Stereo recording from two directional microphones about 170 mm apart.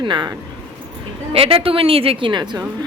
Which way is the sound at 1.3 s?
35° right (ahead or behind).